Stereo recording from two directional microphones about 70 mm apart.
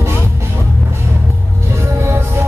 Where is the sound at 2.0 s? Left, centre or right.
Right.